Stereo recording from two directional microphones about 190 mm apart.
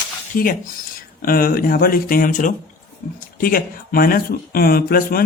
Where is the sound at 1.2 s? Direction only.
50° left (ahead or behind).